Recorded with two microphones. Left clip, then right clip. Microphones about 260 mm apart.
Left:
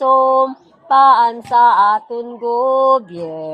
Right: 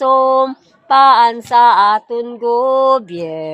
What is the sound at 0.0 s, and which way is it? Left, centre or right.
Female singing, right.